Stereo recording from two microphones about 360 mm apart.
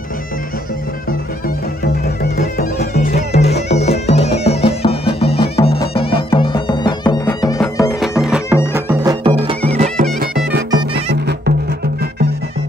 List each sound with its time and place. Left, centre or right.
2.3 s music: left; by 10.0 s centre
11.1 s music: right